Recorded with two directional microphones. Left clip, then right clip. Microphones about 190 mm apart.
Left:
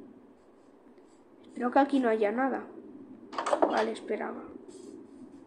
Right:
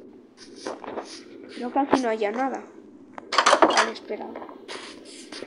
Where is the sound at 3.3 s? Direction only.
50° right (ahead or behind).